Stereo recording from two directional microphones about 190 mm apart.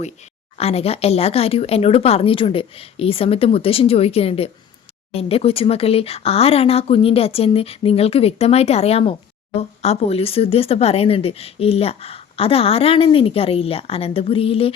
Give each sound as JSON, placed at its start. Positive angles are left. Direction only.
{"t": 0.5, "sound": "speech", "side_deg": 30}